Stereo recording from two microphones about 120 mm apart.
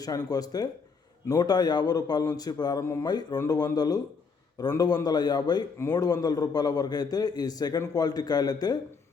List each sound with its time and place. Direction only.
0.0 s a man's voice: 30° left (ahead or behind)